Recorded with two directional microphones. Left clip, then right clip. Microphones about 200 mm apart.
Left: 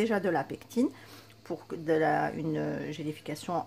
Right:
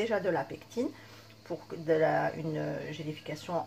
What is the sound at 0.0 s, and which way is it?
Speech, 50° left (ahead or behind).